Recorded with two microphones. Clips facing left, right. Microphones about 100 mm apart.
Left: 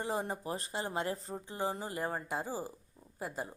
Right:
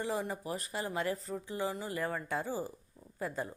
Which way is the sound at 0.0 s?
35° left (ahead or behind).